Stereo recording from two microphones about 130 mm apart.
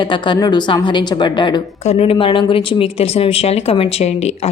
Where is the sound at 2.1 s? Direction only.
40° left (ahead or behind); by 4.5 s 55° left (ahead or behind).